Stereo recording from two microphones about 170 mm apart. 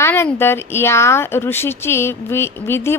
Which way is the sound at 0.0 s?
10° left (ahead or behind).